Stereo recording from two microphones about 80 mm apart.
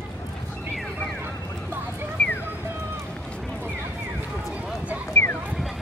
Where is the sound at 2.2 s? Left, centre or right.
Centre.